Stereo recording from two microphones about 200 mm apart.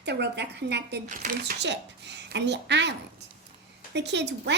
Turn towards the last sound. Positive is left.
turn(degrees=-60)  # may be behind; listen again after turning